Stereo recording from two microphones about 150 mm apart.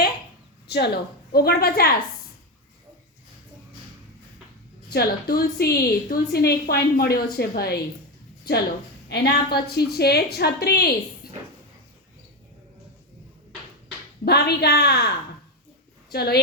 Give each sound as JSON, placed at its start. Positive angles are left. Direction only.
{"t": 0.7, "sound": "a woman's voice", "side_deg": 90}
{"t": 4.9, "sound": "a woman's voice", "side_deg": 90}
{"t": 9.0, "sound": "a woman's voice", "side_deg": 90}
{"t": 14.3, "sound": "a woman's voice", "side_deg": 90}
{"t": 16.1, "sound": "a woman's voice", "side_deg": 90}